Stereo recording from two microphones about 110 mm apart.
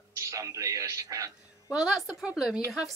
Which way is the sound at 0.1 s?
30° right (ahead or behind).